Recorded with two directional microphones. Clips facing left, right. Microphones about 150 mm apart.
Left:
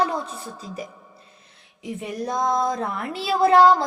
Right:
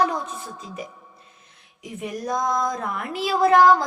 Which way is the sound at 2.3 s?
25° left (ahead or behind).